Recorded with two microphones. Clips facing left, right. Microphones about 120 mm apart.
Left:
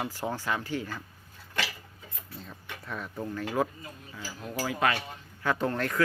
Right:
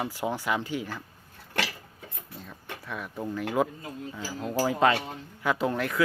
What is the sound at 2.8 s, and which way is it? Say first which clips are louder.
Speech: even; 5° right (ahead or behind).